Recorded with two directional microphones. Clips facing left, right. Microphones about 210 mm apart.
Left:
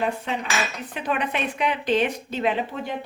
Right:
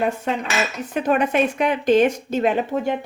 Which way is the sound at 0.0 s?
45° right (ahead or behind).